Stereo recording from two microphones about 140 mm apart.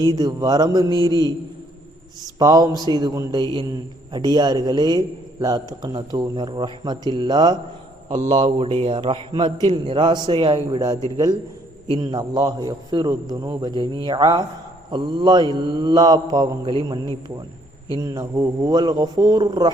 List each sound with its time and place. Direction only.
0.0 s a man's voice: 30° right (ahead or behind)
2.4 s a man's voice: 25° right (ahead or behind)
2.9 s mantra: 30° right (ahead or behind)
4.1 s a man's voice: 30° right (ahead or behind)
8.1 s speech: 55° right (ahead or behind)
8.5 s mantra: 40° right (ahead or behind)
12.1 s a man's voice: 30° right (ahead or behind)
14.8 s mantra: 35° right (ahead or behind)
18.0 s a man's voice: 25° right (ahead or behind)